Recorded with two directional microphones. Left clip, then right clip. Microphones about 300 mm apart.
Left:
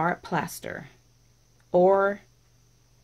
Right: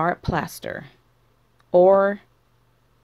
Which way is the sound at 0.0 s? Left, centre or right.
Right.